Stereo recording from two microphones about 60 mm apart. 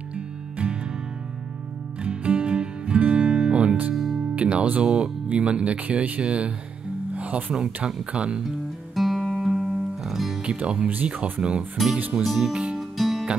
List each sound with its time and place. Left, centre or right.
0.1 s music: right
2.0 s music: right
3.9 s music: centre
4.2 s music: right
4.8 s speech: centre
5.3 s speech: right
8.9 s music: centre
10.4 s speech: right
11.8 s speech: centre
12.1 s speech: centre
12.7 s music: centre